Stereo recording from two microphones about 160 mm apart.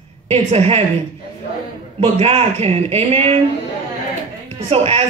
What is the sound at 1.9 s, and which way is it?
Speech, 40° right (ahead or behind).